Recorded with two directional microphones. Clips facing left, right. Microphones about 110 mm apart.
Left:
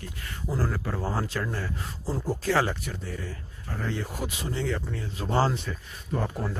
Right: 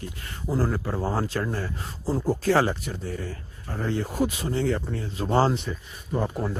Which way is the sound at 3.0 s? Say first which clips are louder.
Right 4 dB; 35° right (ahead or behind).